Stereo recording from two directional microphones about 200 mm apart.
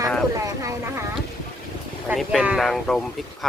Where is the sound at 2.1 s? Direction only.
Centre (ahead or behind).